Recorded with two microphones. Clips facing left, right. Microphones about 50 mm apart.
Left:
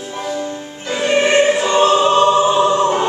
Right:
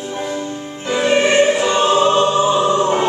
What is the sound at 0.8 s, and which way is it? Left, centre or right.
Music, centre.